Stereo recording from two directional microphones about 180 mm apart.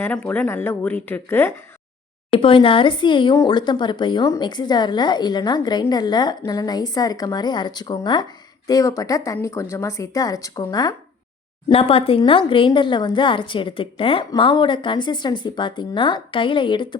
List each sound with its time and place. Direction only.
0.0 s speech: 10° left (ahead or behind)
2.3 s speech: 30° left (ahead or behind)
11.7 s speech: 30° left (ahead or behind)